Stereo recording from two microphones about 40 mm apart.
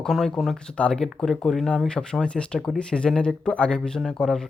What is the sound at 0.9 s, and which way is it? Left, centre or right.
Speech, centre.